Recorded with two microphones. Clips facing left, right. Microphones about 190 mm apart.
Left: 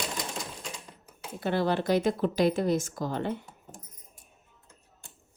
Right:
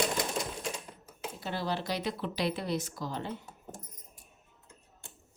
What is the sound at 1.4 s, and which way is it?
Speech, 60° left (ahead or behind).